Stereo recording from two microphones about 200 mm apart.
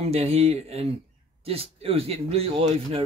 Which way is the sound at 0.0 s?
30° right (ahead or behind).